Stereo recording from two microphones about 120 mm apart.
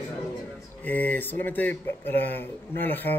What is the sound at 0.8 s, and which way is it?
Speech, 15° left (ahead or behind).